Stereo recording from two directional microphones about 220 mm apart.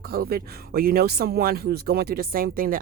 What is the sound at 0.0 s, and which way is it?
Speech, 45° right (ahead or behind).